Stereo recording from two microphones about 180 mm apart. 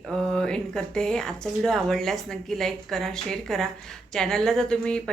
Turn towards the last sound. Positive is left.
turn(degrees=5)  # may be behind; listen again after turning